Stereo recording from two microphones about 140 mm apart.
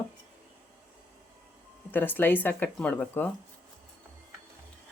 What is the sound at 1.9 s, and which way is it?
Speech, 15° left (ahead or behind).